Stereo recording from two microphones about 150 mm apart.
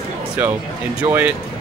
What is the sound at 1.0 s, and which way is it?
Speech, 15° right (ahead or behind).